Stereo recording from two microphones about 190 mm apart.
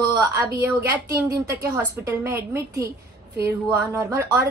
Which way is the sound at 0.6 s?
10° right (ahead or behind).